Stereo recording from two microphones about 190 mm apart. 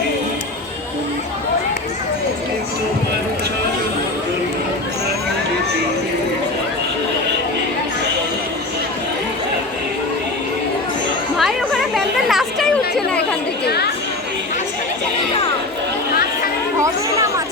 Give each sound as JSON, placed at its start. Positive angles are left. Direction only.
{"t": 11.3, "sound": "chatter", "side_deg": 0}
{"t": 13.7, "sound": "chatter", "side_deg": 55}
{"t": 16.8, "sound": "a sound", "side_deg": -15}